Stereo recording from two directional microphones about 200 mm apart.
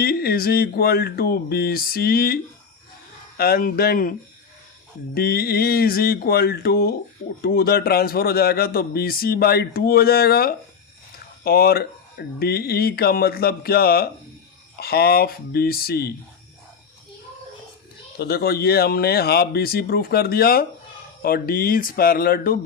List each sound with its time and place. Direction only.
0.0 s a man's voice: 50° left (ahead or behind)
5.1 s a man's voice: 50° left (ahead or behind)
18.2 s a man's voice: 50° left (ahead or behind)